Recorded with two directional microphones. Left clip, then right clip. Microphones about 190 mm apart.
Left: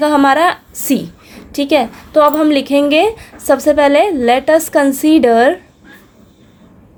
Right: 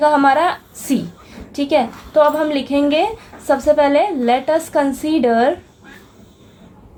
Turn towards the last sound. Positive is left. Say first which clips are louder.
# left 6 dB
turn(degrees=50)  # may be behind; listen again after turning